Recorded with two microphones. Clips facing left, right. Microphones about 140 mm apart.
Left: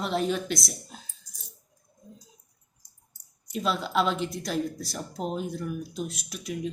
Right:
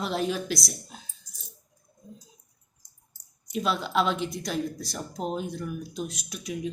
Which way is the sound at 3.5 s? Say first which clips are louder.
Even; centre (ahead or behind).